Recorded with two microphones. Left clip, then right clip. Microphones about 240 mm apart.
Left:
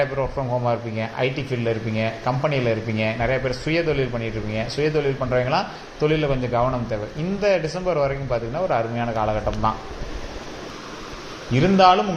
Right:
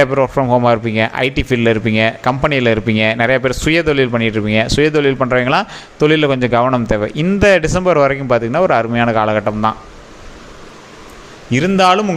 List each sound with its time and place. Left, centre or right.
0.0 s a man's voice: right
11.5 s a man's voice: right